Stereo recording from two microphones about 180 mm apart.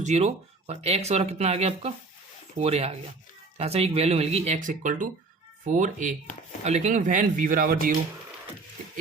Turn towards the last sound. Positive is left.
turn(degrees=-55)  # may be behind; listen again after turning